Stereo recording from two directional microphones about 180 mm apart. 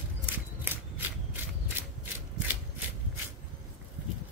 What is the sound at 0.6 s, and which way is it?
Shuffling cards, 10° right (ahead or behind).